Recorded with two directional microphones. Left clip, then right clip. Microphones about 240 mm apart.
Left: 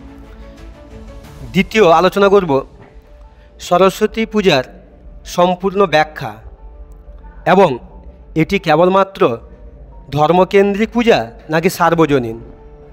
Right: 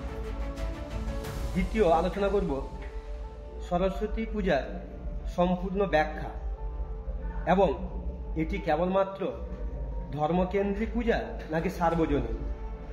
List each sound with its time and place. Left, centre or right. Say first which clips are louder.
1.7 s a man's voice: left 15 dB; left
3.6 s a man's voice: left 18 dB; left
7.4 s a man's voice: left 14 dB; left